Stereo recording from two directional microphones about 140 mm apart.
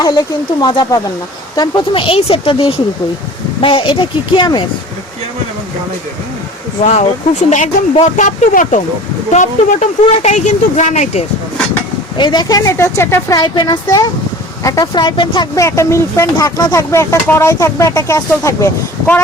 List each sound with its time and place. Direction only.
0.6 s speech: 30° left (ahead or behind)
6.8 s speech: 55° left (ahead or behind)
12.1 s speech: 35° left (ahead or behind); by 19.2 s 15° left (ahead or behind)